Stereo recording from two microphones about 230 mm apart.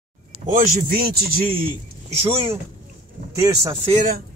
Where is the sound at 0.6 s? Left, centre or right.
Right.